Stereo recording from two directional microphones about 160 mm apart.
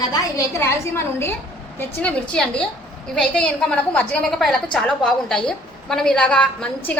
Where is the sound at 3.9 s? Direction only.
10° left (ahead or behind).